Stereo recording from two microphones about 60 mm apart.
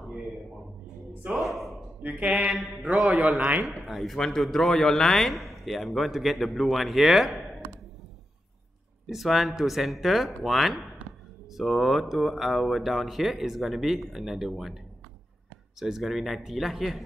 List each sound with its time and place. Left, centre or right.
1.4 s a man's voice: centre
2.0 s speech: right
3.6 s a man's voice: centre
9.0 s a man's voice: centre
15.8 s a man's voice: centre